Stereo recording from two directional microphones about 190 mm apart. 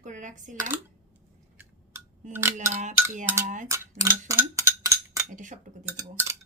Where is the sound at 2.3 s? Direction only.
15° right (ahead or behind).